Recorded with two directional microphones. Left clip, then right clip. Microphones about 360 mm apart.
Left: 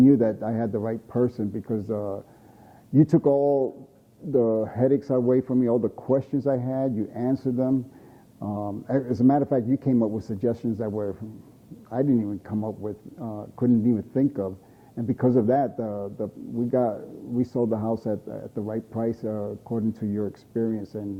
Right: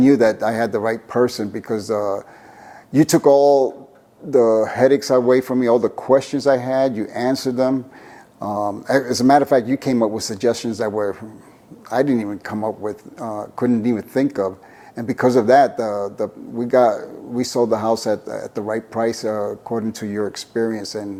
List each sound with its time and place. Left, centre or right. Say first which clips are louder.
0.0 s a man's voice: right 6 dB; centre